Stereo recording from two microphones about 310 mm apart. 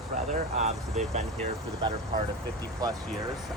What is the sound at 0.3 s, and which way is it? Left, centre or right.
Speech, right.